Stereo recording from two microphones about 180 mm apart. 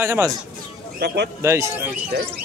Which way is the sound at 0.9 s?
70° right (ahead or behind).